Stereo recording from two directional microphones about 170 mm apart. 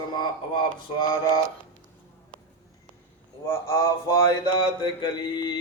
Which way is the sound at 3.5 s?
20° left (ahead or behind).